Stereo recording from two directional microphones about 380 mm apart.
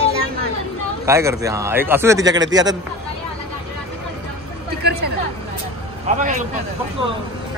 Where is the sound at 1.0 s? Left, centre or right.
Centre.